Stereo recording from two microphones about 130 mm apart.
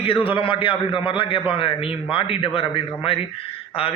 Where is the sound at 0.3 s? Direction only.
40° left (ahead or behind).